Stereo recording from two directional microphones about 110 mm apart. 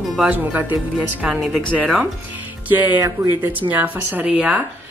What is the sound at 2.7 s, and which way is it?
Speech, 15° right (ahead or behind).